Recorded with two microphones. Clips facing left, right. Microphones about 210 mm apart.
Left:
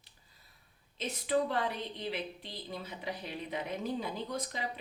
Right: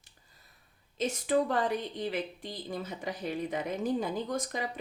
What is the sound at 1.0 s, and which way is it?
Speech, 45° right (ahead or behind).